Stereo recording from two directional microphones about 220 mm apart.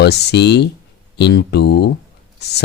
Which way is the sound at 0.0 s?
50° left (ahead or behind).